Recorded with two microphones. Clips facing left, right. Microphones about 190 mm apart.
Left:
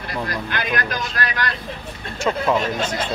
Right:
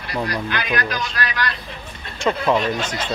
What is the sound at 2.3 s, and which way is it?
Speech, 5° left (ahead or behind).